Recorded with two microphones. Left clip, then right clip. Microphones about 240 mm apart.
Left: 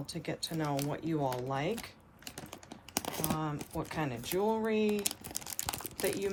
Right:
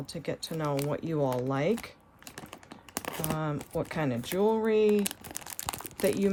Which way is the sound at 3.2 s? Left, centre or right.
Right.